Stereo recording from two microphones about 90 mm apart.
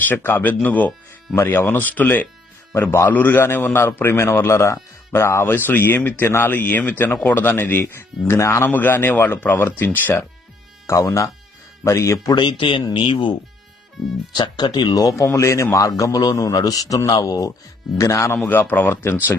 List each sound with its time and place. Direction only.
0.0 s a man's voice: 20° left (ahead or behind)
8.6 s a man's voice: 20° left (ahead or behind)
10.8 s a man's voice: 35° left (ahead or behind)
12.3 s speech: 60° left (ahead or behind)
14.3 s a man's voice: 55° left (ahead or behind); by 18.3 s 35° left (ahead or behind)
18.4 s a man's voice: 20° left (ahead or behind)